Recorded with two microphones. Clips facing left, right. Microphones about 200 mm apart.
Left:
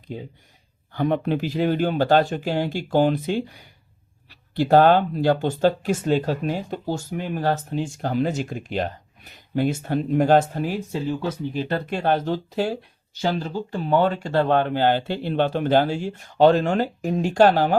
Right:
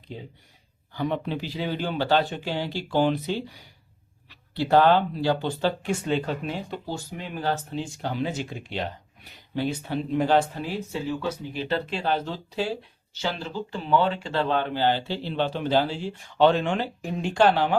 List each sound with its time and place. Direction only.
0.1 s speech: 45° left (ahead or behind)
16.1 s speech: 40° left (ahead or behind)